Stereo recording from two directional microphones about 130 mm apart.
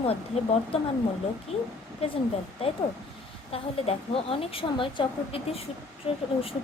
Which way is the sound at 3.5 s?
50° left (ahead or behind).